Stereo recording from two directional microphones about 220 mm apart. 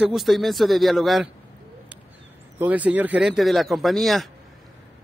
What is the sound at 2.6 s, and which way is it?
Speech, 5° right (ahead or behind).